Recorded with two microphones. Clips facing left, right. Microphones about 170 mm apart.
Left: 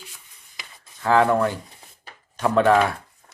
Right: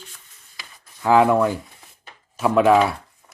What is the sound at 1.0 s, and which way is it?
Speech, 15° right (ahead or behind).